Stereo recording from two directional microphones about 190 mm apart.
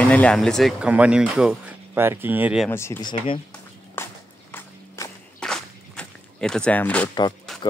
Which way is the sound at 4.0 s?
10° left (ahead or behind).